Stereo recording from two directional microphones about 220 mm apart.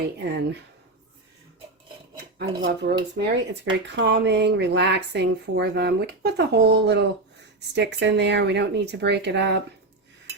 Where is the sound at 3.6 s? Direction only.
55° right (ahead or behind).